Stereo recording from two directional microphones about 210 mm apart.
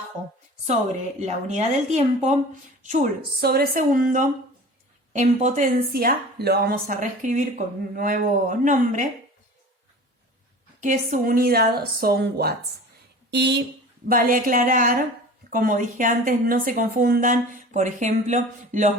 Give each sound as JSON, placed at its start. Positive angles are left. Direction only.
{"t": 1.2, "sound": "speech", "side_deg": -35}
{"t": 10.8, "sound": "speech", "side_deg": -40}
{"t": 14.1, "sound": "speech", "side_deg": -40}